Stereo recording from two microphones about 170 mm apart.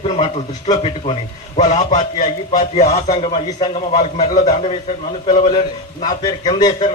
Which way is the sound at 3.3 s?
25° left (ahead or behind).